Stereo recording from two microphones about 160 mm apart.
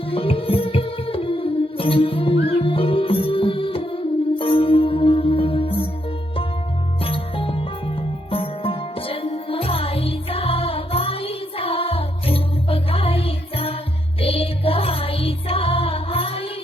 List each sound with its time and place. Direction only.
0.1 s music: 35° left (ahead or behind)
7.0 s music: 35° left (ahead or behind)